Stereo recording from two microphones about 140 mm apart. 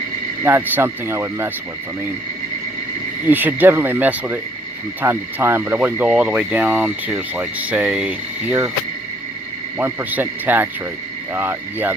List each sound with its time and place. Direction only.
0.4 s speech: 15° right (ahead or behind)
3.2 s speech: 15° right (ahead or behind)
9.7 s speech: 15° right (ahead or behind)